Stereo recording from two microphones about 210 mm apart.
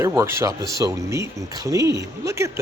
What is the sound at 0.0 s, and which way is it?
Speech, 10° right (ahead or behind).